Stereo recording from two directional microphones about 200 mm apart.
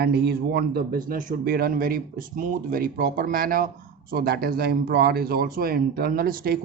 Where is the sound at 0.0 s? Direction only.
55° right (ahead or behind).